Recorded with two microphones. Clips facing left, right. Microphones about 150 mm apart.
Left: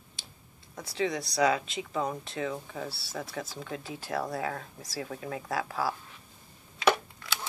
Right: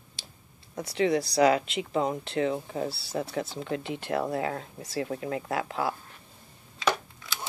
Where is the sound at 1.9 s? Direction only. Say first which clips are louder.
Right 4 dB; 30° right (ahead or behind).